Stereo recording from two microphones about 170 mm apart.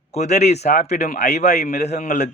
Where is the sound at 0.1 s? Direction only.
40° left (ahead or behind).